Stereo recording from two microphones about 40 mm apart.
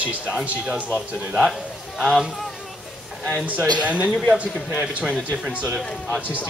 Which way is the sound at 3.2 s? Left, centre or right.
Right.